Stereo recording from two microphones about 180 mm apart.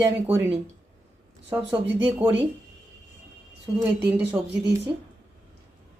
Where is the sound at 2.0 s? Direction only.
10° right (ahead or behind).